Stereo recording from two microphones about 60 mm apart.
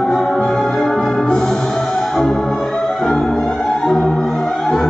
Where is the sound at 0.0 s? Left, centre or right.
Centre.